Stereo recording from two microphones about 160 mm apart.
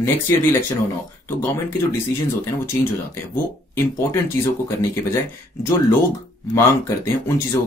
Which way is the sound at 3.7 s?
15° left (ahead or behind).